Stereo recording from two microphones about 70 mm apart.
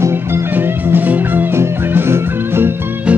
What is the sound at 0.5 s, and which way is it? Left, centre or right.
Music, right.